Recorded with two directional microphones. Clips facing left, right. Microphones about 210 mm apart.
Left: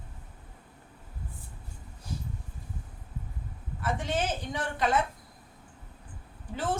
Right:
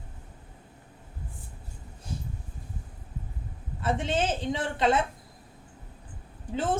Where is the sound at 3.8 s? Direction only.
25° right (ahead or behind).